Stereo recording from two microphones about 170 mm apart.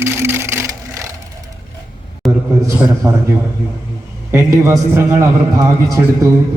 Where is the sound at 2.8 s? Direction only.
15° right (ahead or behind).